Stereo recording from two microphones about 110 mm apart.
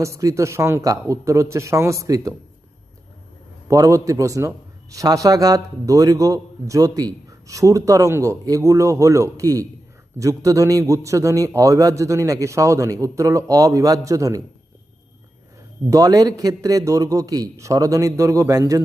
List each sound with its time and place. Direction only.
0.0 s a man's voice: 30° right (ahead or behind)
3.7 s a man's voice: 30° right (ahead or behind)
15.9 s a man's voice: 35° right (ahead or behind)